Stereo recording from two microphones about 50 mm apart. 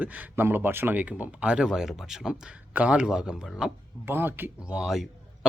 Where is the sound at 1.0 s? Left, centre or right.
Right.